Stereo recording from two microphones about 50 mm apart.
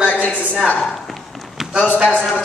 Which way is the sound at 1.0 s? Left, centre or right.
Centre.